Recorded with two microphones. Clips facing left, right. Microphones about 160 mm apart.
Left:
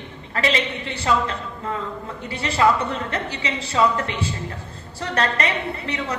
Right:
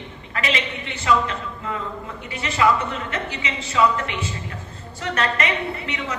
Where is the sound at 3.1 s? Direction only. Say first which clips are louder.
Left 2 dB; 35° left (ahead or behind).